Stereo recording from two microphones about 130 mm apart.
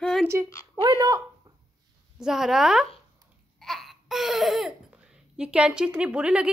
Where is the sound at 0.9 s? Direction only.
30° right (ahead or behind).